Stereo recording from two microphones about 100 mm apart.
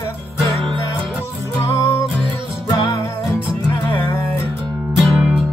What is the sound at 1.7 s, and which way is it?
Music, 25° left (ahead or behind).